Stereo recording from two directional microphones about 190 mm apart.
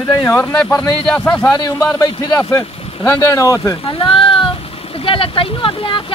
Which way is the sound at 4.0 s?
30° left (ahead or behind).